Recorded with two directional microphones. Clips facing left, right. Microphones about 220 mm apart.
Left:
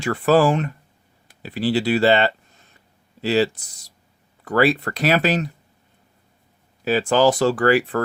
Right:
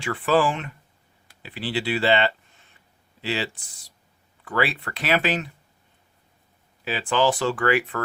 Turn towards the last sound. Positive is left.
turn(degrees=35)  # may be behind; listen again after turning